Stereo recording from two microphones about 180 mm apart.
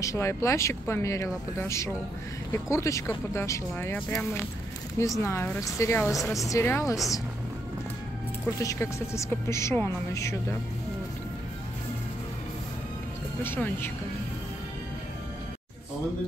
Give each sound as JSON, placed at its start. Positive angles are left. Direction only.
{"t": 0.0, "sound": "speech", "side_deg": 15}
{"t": 8.5, "sound": "speech", "side_deg": 15}
{"t": 13.4, "sound": "speech", "side_deg": 10}